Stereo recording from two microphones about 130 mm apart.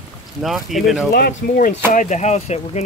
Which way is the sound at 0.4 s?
Centre (ahead or behind).